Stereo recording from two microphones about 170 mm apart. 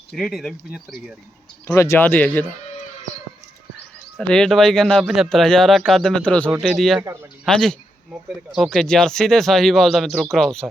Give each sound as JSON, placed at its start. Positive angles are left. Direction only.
{"t": 0.1, "sound": "speech", "side_deg": 0}
{"t": 1.6, "sound": "speech", "side_deg": 20}
{"t": 4.2, "sound": "speech", "side_deg": 5}
{"t": 7.0, "sound": "speech", "side_deg": -15}
{"t": 7.4, "sound": "speech", "side_deg": 5}